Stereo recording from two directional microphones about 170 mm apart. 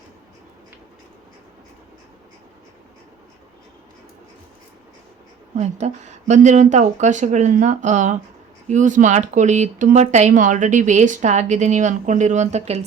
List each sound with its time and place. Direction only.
5.5 s speech: 40° right (ahead or behind)